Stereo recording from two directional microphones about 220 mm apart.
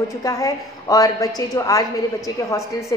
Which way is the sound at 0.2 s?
15° left (ahead or behind).